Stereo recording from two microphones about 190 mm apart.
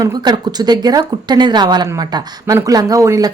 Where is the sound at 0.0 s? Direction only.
20° right (ahead or behind).